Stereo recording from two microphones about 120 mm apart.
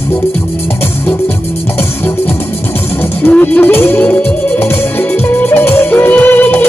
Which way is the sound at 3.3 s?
10° left (ahead or behind).